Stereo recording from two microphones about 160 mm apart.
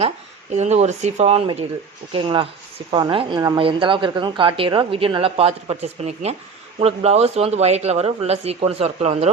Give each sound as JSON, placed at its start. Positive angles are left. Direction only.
{"t": 0.5, "sound": "a woman's voice", "side_deg": -45}